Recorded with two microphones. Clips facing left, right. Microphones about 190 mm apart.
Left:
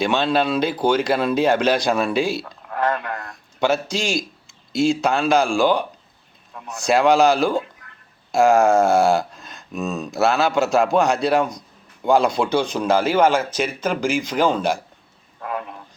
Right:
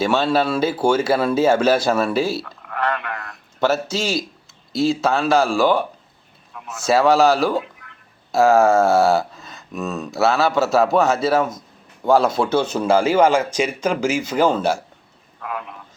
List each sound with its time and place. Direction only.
0.0 s a man's voice: 5° right (ahead or behind)
2.4 s a sound: 25° left (ahead or behind)
2.9 s speech: 40° left (ahead or behind)
3.6 s a man's voice: 5° right (ahead or behind)
6.8 s a man's voice: 5° right (ahead or behind)
7.6 s a sound: 40° left (ahead or behind)
8.3 s a man's voice: centre (ahead or behind)
15.4 s a man's voice: 35° left (ahead or behind)